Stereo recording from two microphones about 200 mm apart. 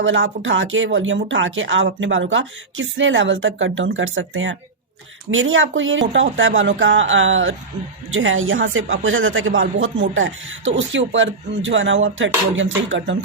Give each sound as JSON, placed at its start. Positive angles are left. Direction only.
{"t": 0.0, "sound": "speech", "side_deg": -70}